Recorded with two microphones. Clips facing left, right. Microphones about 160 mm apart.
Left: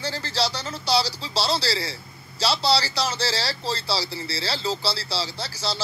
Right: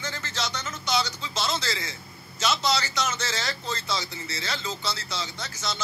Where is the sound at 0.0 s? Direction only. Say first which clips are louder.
Left 6 dB; 35° left (ahead or behind).